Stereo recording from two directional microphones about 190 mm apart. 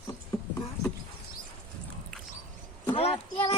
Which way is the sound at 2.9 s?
30° left (ahead or behind).